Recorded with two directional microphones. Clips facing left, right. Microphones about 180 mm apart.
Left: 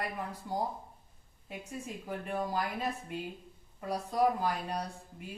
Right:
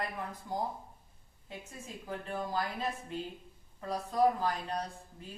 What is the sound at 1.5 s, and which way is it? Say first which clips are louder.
Speech: left 4 dB; 15° left (ahead or behind).